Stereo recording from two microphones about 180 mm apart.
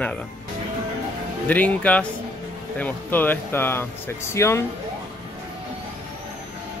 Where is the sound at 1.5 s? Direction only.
10° left (ahead or behind).